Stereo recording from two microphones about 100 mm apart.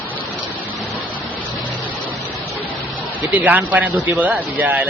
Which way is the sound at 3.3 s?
15° right (ahead or behind).